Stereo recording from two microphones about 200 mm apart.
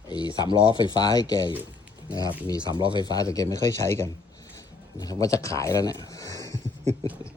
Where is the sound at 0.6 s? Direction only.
25° left (ahead or behind).